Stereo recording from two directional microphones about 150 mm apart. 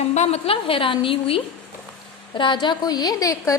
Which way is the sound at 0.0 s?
50° left (ahead or behind).